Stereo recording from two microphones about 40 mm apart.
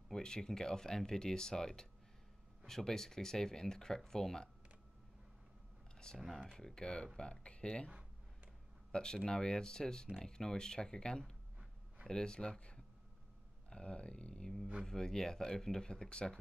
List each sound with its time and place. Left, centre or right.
0.1 s speech: centre
6.1 s speech: centre
6.4 s speech: centre
8.9 s speech: centre